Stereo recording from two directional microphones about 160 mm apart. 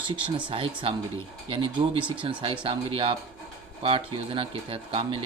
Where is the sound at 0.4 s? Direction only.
35° right (ahead or behind).